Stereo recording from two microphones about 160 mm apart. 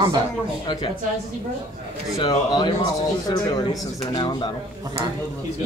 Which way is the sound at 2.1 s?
25° left (ahead or behind).